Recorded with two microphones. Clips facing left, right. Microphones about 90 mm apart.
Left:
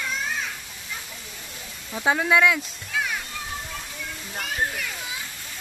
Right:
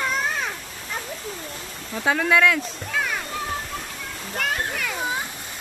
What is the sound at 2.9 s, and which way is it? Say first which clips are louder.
Music: right 1 dB; 60° right (ahead or behind).